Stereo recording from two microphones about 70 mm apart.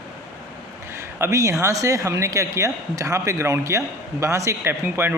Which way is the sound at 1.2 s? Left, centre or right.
Right.